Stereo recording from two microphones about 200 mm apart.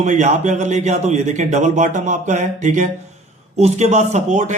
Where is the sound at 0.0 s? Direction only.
35° right (ahead or behind).